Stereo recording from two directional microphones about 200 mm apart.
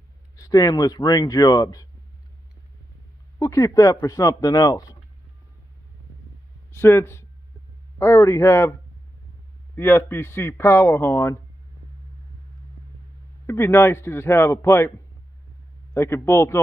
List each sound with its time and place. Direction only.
0.4 s speech: 15° left (ahead or behind)
3.3 s speech: 15° left (ahead or behind)
6.7 s speech: 10° left (ahead or behind)
9.8 s speech: 10° left (ahead or behind)
13.5 s speech: 10° left (ahead or behind)
15.9 s speech: 15° left (ahead or behind)